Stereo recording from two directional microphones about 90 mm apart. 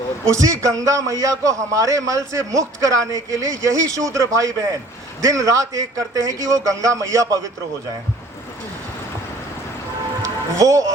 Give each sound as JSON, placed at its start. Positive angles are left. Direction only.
{"t": 0.3, "sound": "a man's voice", "side_deg": -35}
{"t": 10.2, "sound": "speech", "side_deg": -35}